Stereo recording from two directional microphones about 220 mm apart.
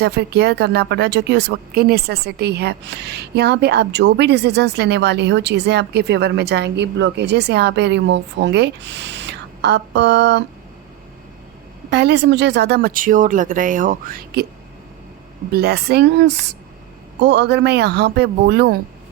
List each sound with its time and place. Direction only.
0.0 s a woman's voice: 50° right (ahead or behind)
11.9 s speech: 50° right (ahead or behind)
15.5 s a woman's voice: 45° right (ahead or behind)